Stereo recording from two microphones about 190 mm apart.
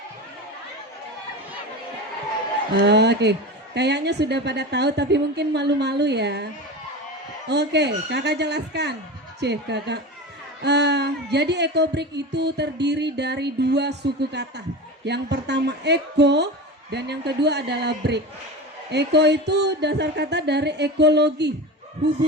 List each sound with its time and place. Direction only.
2.7 s speech: 60° right (ahead or behind)